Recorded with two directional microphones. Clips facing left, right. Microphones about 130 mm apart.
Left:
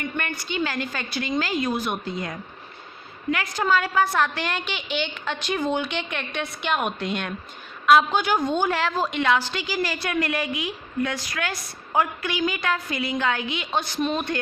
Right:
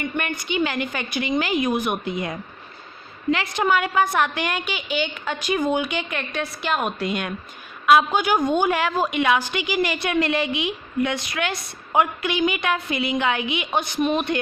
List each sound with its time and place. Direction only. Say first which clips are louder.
0.0 s a woman's voice: right 3 dB; 15° right (ahead or behind)
3.3 s a woman's voice: right 1 dB; 25° right (ahead or behind)